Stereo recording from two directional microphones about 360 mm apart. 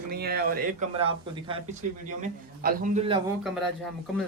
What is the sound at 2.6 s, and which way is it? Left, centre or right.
Speech, right.